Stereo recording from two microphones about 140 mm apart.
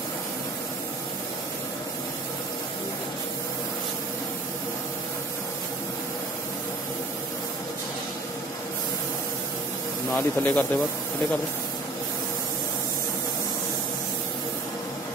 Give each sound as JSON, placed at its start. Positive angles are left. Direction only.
{"t": 10.1, "sound": "speech", "side_deg": 10}